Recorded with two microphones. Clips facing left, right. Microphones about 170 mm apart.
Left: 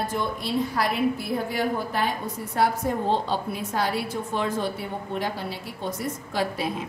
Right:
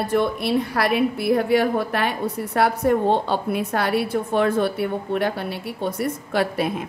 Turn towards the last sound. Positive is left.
turn(degrees=-60)  # may be behind; listen again after turning